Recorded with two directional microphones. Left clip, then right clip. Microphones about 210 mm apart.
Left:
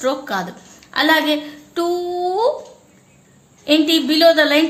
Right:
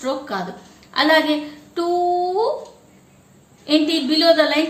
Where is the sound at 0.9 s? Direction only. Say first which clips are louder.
Left 1 dB; 50° left (ahead or behind).